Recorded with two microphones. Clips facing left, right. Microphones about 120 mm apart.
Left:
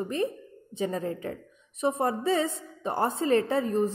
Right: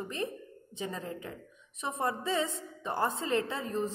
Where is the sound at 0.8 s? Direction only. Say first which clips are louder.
Left 8 dB; 35° left (ahead or behind).